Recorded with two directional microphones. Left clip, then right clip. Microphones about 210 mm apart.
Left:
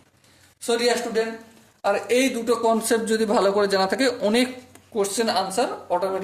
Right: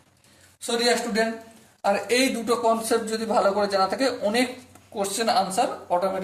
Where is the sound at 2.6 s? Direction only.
35° left (ahead or behind).